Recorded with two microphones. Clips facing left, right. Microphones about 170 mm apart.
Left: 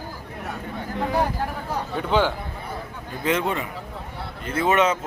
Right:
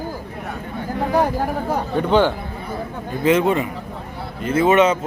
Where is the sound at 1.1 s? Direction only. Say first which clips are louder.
Right 6 dB; 45° right (ahead or behind).